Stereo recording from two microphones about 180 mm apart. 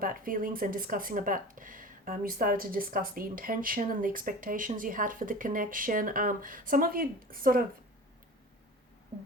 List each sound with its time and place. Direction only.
0.0 s speech: 50° right (ahead or behind)